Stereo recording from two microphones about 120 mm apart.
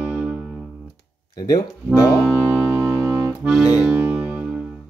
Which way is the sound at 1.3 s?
35° left (ahead or behind).